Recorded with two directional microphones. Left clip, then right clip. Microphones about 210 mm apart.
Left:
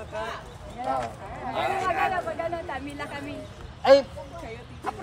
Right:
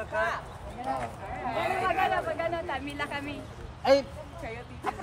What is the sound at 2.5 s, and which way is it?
Speech, centre (ahead or behind).